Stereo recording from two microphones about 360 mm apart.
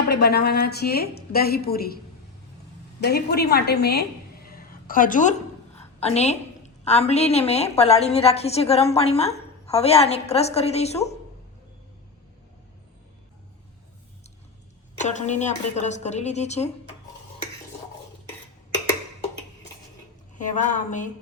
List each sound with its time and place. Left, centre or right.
0.1 s a woman's voice: left
3.0 s a woman's voice: left
4.4 s a sound: left
6.8 s a woman's voice: centre
14.9 s a woman's voice: centre
20.3 s a woman's voice: left